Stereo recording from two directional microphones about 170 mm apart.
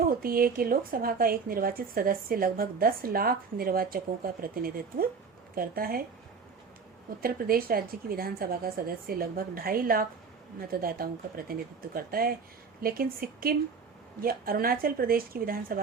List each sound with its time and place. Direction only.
0.2 s speech: 60° right (ahead or behind)
7.2 s speech: 60° right (ahead or behind)